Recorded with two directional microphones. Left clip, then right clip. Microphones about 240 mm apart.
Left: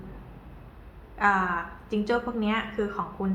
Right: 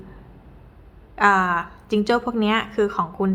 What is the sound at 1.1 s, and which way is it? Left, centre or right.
A woman's voice, right.